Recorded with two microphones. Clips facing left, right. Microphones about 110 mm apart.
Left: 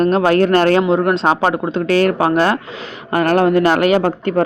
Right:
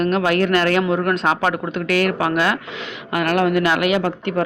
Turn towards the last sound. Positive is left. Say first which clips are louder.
# left 5 dB
turn(degrees=40)  # may be behind; listen again after turning